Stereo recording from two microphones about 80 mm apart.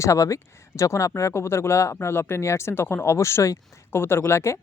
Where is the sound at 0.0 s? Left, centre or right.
Left.